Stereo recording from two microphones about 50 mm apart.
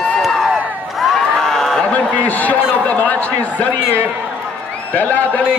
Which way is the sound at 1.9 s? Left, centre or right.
Left.